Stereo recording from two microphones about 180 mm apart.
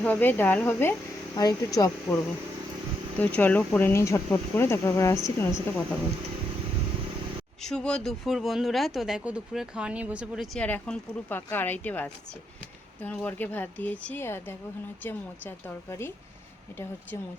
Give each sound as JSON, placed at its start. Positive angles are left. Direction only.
{"t": 0.0, "sound": "speech", "side_deg": 10}
{"t": 3.2, "sound": "speech", "side_deg": 10}
{"t": 7.6, "sound": "speech", "side_deg": 5}